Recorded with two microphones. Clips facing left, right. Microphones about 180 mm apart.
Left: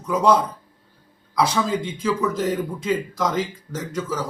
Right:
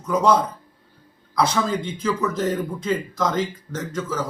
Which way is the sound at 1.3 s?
5° left (ahead or behind).